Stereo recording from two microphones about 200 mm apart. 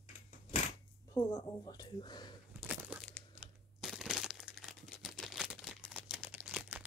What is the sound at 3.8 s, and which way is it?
Crumpling, centre (ahead or behind).